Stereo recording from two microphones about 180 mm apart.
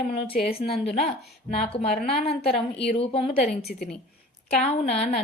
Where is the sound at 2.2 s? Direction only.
30° left (ahead or behind).